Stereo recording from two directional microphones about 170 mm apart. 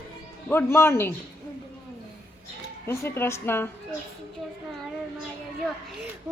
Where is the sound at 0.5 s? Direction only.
15° left (ahead or behind).